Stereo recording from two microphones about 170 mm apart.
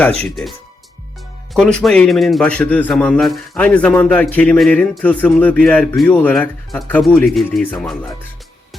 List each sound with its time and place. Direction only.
0.0 s speech: 5° left (ahead or behind)
1.5 s a man's voice: 5° left (ahead or behind)